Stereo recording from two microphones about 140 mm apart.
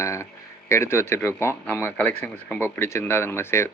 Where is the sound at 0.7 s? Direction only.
20° left (ahead or behind).